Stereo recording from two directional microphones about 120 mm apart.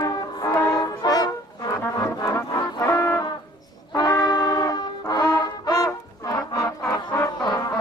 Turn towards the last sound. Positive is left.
turn(degrees=35)  # may be behind; listen again after turning